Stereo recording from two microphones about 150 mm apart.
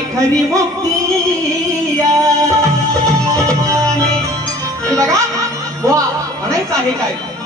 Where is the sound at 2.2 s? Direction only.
20° right (ahead or behind).